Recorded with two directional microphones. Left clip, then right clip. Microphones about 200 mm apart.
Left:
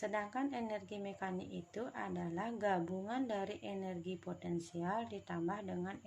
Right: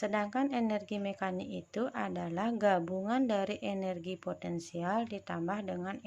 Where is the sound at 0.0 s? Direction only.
45° right (ahead or behind).